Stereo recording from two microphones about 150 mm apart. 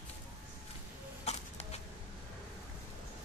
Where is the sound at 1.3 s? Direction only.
45° left (ahead or behind).